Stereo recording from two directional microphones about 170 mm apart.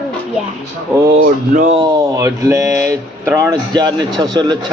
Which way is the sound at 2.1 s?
20° right (ahead or behind).